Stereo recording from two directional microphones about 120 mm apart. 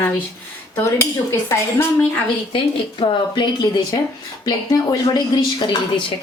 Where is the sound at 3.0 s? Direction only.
50° left (ahead or behind).